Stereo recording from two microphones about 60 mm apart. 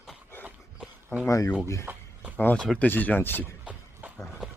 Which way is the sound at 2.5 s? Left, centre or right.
Centre.